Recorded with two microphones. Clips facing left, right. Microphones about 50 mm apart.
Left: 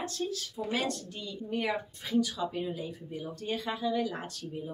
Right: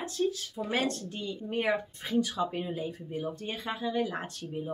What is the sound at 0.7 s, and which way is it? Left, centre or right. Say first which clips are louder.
A woman's voice: right 3 dB; right.